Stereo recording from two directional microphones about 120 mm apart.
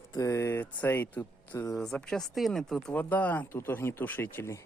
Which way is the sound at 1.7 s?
5° left (ahead or behind).